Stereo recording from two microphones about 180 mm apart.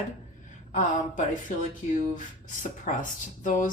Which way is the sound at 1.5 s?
45° left (ahead or behind).